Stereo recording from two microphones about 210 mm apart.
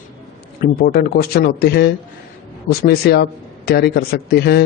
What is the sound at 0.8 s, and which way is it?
A man's voice, 45° left (ahead or behind).